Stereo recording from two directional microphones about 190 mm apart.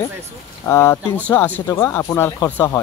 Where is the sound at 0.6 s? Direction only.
15° left (ahead or behind).